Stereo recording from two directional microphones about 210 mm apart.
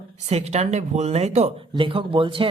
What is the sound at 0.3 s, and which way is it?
Speech, 30° right (ahead or behind).